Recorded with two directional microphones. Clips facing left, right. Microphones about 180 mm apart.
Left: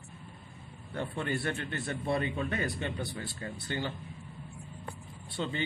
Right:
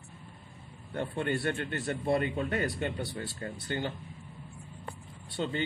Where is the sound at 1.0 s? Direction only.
50° right (ahead or behind).